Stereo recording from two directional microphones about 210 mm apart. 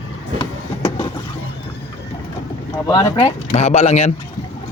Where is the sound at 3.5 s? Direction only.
30° left (ahead or behind).